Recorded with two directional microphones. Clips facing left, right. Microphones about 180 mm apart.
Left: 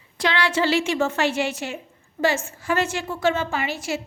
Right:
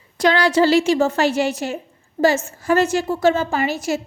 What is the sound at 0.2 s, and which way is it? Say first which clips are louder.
A woman's voice: right 7 dB; 40° right (ahead or behind).